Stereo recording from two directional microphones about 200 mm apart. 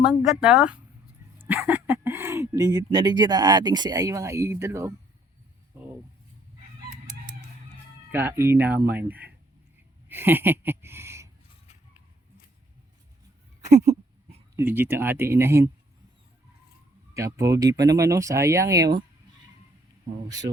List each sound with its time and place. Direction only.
0.3 s speech: 5° right (ahead or behind)
8.1 s speech: 10° right (ahead or behind)
13.7 s a sound: 30° right (ahead or behind)
14.5 s speech: 10° right (ahead or behind)
17.2 s speech: 15° right (ahead or behind)
20.2 s speech: 20° right (ahead or behind)